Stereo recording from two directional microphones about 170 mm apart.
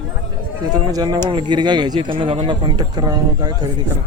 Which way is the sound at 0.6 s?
25° right (ahead or behind).